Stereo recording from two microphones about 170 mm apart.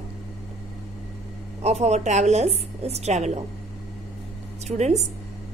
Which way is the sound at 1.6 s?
40° right (ahead or behind).